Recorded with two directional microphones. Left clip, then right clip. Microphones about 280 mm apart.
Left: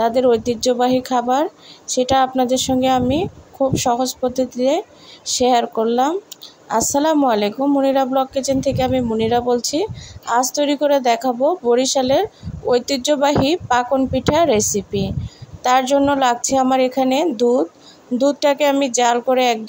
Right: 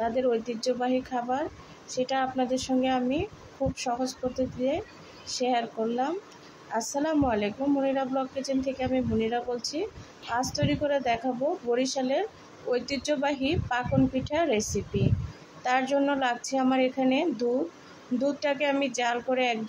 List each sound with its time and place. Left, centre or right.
0.0 s a woman's voice: left